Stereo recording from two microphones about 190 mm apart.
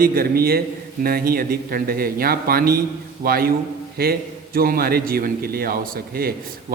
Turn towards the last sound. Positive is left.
turn(degrees=-50)  # may be behind; listen again after turning